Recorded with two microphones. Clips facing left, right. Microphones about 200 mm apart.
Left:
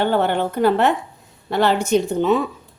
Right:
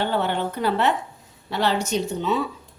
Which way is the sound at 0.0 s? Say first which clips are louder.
Left 5 dB; 55° left (ahead or behind).